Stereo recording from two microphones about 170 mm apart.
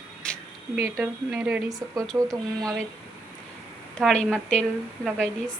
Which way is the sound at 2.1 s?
20° right (ahead or behind).